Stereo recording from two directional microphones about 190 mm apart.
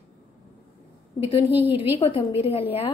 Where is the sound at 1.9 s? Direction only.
30° left (ahead or behind).